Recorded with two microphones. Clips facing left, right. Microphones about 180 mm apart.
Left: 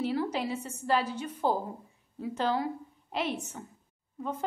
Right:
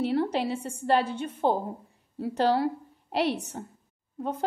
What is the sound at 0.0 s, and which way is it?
Speech, 65° right (ahead or behind).